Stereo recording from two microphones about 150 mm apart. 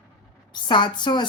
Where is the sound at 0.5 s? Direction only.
30° left (ahead or behind).